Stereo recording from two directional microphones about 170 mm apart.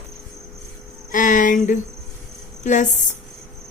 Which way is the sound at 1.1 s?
50° left (ahead or behind).